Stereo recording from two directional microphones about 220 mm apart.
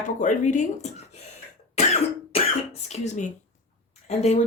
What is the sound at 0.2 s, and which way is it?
Speech, 35° left (ahead or behind).